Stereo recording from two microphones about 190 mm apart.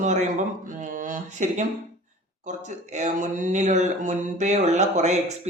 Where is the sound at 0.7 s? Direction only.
45° right (ahead or behind).